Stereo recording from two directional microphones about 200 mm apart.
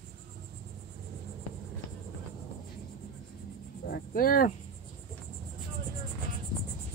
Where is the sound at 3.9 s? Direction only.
45° left (ahead or behind).